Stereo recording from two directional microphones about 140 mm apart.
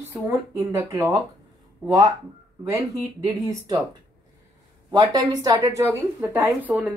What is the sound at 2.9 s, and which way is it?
Speech, 25° right (ahead or behind).